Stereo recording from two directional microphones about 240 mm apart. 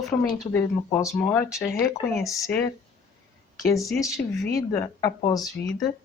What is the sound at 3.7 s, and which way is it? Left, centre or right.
Speech, centre.